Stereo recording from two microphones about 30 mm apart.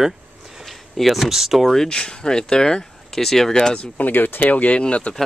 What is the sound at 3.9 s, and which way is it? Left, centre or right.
Speech, left.